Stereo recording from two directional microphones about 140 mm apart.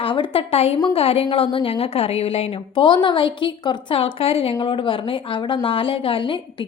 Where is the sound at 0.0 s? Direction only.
40° left (ahead or behind).